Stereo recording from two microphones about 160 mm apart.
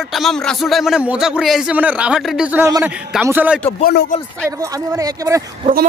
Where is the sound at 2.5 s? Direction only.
15° right (ahead or behind).